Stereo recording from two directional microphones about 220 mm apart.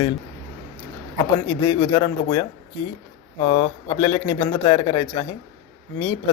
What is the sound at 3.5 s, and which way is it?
Speech, 25° left (ahead or behind).